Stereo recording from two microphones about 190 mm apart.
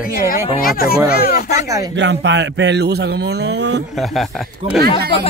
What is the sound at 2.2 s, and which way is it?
Speech, 65° right (ahead or behind).